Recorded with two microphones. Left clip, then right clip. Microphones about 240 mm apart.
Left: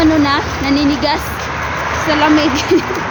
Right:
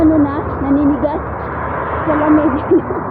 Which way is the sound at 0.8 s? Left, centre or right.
Left.